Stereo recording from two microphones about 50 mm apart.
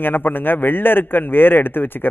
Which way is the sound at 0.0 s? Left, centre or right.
Left.